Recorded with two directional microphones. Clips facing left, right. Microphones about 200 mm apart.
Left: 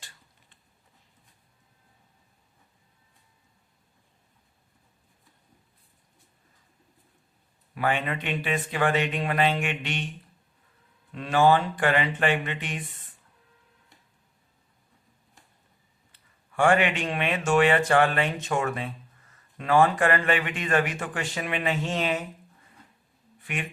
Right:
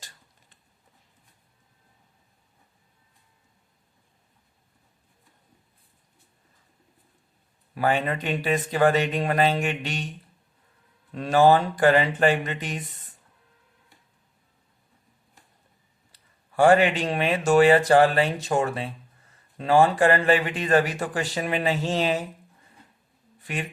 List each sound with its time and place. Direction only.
7.8 s speech: 40° right (ahead or behind)
11.1 s speech: 40° right (ahead or behind)
16.1 s speech: 35° right (ahead or behind)